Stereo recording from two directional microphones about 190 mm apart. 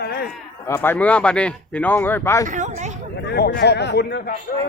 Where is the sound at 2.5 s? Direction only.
40° right (ahead or behind).